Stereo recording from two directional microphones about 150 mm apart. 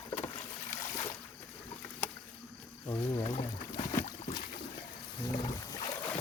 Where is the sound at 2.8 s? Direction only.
25° left (ahead or behind).